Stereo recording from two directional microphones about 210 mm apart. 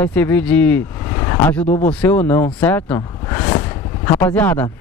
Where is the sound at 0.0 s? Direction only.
10° left (ahead or behind).